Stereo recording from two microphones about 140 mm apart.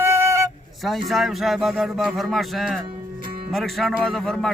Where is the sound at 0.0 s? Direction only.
20° right (ahead or behind).